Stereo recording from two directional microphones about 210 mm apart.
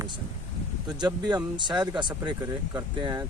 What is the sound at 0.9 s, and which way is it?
Speech, 20° right (ahead or behind).